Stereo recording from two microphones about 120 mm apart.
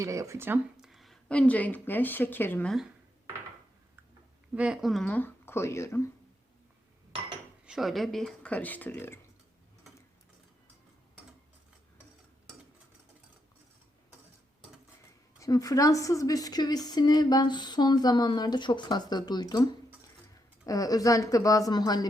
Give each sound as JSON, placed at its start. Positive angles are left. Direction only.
{"t": 0.0, "sound": "speech", "side_deg": -25}
{"t": 0.8, "sound": "speech", "side_deg": 0}
{"t": 2.6, "sound": "speech", "side_deg": 0}
{"t": 4.5, "sound": "speech", "side_deg": -10}
{"t": 5.0, "sound": "speech", "side_deg": 15}
{"t": 7.6, "sound": "speech", "side_deg": -5}
{"t": 15.4, "sound": "speech", "side_deg": 30}
{"t": 20.7, "sound": "speech", "side_deg": 30}